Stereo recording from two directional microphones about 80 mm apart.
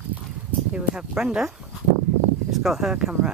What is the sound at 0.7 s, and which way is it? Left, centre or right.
Speech, centre.